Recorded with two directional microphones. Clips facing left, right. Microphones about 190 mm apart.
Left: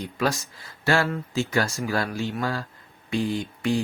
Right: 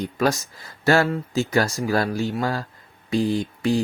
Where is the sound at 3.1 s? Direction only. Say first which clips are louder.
Right 4 dB; 35° right (ahead or behind).